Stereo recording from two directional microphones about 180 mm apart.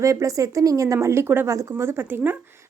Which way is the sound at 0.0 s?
15° right (ahead or behind).